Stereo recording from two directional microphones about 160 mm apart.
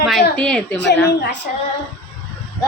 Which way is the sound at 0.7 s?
90° left.